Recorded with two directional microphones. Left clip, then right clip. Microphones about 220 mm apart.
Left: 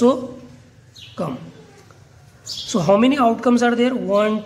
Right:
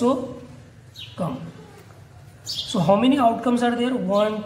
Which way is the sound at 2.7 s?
45° left (ahead or behind).